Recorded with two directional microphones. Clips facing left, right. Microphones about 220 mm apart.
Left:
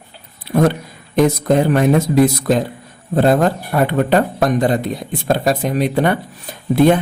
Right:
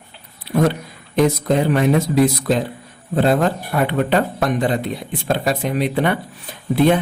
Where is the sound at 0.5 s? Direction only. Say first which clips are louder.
Left 3 dB; 50° left (ahead or behind).